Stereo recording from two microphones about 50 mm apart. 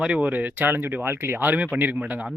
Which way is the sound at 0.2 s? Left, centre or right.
Right.